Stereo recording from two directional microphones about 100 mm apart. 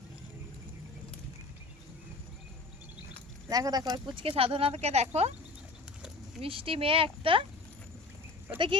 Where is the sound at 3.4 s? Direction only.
35° right (ahead or behind).